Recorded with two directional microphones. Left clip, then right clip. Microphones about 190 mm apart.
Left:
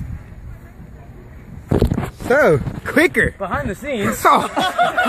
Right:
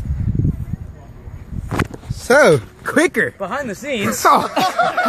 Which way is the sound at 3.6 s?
20° right (ahead or behind).